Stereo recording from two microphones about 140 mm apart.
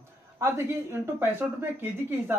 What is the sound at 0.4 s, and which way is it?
Speech, 20° right (ahead or behind).